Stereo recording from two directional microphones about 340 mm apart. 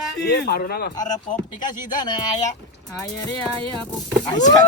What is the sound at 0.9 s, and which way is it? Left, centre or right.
Speech, centre.